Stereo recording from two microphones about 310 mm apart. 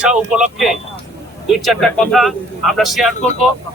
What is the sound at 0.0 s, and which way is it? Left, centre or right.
Speech, centre.